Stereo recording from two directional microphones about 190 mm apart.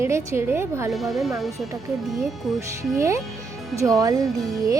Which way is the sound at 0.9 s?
Centre (ahead or behind).